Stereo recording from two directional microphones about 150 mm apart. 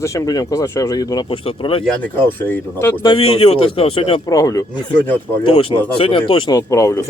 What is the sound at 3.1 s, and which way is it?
A man's voice, 40° left (ahead or behind).